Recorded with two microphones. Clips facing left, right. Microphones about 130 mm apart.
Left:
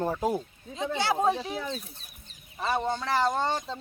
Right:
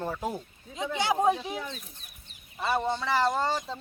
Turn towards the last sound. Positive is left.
turn(degrees=0)  # may be behind; listen again after turning